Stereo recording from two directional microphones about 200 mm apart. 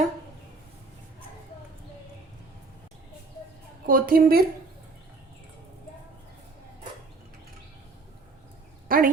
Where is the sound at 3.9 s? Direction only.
45° right (ahead or behind).